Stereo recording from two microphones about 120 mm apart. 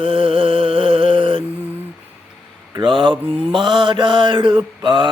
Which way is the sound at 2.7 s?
40° right (ahead or behind).